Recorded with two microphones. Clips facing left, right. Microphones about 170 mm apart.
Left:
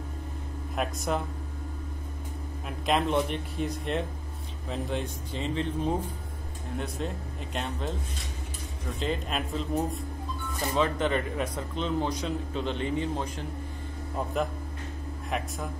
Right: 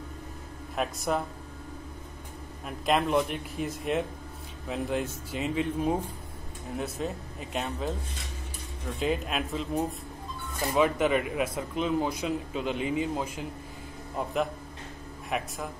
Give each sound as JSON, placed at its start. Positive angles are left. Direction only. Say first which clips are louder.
{"t": 0.7, "sound": "speech", "louder": "right 1 dB", "side_deg": 0}
{"t": 2.8, "sound": "speech", "louder": "right 1 dB", "side_deg": 0}
{"t": 9.0, "sound": "speech", "louder": "right 2 dB", "side_deg": -5}